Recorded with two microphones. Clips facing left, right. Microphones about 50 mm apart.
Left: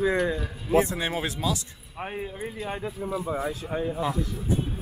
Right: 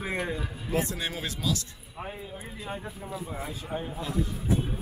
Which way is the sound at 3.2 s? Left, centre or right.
Left.